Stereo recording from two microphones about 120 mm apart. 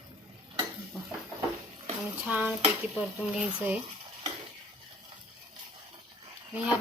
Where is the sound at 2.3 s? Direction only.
10° right (ahead or behind).